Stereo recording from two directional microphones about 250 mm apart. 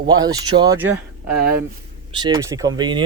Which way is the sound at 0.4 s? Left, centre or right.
Centre.